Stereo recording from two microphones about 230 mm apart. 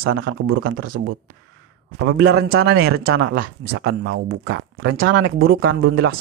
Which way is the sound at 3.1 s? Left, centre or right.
Right.